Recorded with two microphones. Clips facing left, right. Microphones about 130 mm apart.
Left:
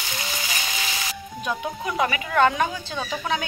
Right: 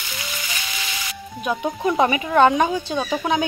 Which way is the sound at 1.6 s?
25° right (ahead or behind).